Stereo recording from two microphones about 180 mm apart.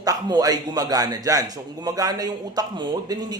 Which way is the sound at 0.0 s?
20° right (ahead or behind).